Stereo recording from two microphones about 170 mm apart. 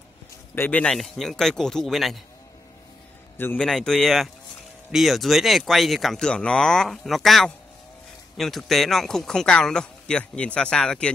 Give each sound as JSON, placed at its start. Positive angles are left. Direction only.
{"t": 0.6, "sound": "speech", "side_deg": 10}
{"t": 3.3, "sound": "speech", "side_deg": 10}